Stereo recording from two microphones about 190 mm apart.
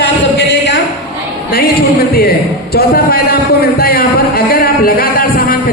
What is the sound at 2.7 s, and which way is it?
A man's voice, 55° left (ahead or behind).